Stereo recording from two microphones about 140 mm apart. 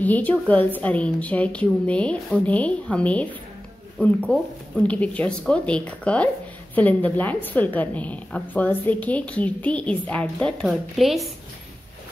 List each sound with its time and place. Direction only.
0.0 s a woman's voice: 10° left (ahead or behind)